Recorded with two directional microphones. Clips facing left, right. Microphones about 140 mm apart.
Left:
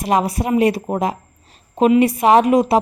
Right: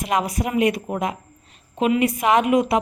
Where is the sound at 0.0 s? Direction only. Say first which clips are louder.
Left 4 dB; 30° left (ahead or behind).